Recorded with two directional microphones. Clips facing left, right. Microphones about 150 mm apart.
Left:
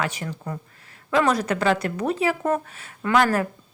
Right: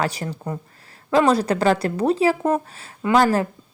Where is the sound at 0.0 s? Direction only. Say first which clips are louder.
Right 3 dB; 35° right (ahead or behind).